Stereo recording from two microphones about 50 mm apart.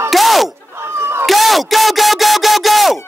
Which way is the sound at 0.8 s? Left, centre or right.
Right.